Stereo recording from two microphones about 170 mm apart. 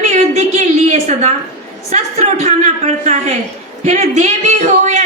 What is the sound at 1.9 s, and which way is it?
A woman's voice, 40° right (ahead or behind).